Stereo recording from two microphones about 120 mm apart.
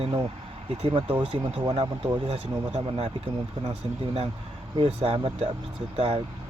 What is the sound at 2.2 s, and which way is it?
Speech, 60° right (ahead or behind).